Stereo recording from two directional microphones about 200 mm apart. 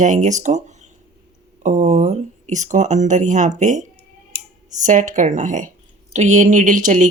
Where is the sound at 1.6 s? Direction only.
35° right (ahead or behind).